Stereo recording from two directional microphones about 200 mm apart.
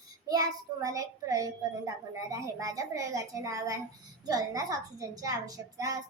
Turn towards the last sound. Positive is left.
turn(degrees=-15)  # may be behind; listen again after turning